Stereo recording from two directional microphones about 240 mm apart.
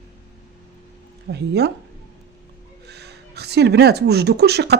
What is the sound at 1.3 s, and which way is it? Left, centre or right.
Speech, right.